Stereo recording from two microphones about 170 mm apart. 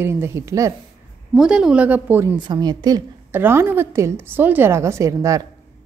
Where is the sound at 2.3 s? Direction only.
25° right (ahead or behind).